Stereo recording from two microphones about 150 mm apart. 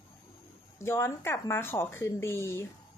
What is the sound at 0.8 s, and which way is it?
A woman's voice, 15° left (ahead or behind).